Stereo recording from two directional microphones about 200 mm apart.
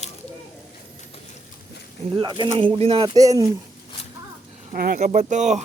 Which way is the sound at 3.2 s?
20° right (ahead or behind).